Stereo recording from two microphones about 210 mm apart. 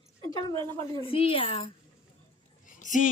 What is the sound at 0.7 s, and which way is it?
Speech, 20° left (ahead or behind).